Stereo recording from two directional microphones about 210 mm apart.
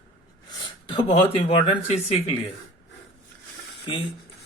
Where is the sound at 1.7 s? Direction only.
25° left (ahead or behind).